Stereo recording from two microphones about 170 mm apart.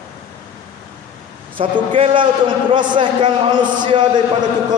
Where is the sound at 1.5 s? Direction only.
30° right (ahead or behind).